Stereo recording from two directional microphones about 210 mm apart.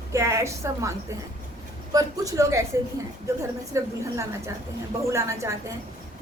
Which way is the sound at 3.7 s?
15° right (ahead or behind).